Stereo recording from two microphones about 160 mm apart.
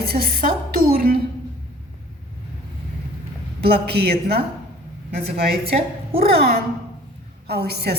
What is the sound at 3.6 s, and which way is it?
A woman's voice, 90° right.